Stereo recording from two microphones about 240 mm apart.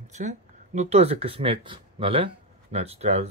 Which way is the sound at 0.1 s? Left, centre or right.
Right.